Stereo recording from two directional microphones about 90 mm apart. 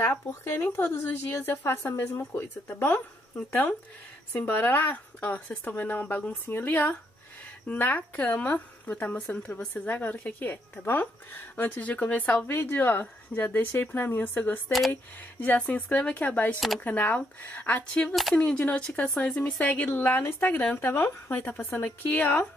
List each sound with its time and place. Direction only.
0.4 s speech: 25° left (ahead or behind)
16.5 s speech: centre (ahead or behind)
16.8 s speech: 20° left (ahead or behind)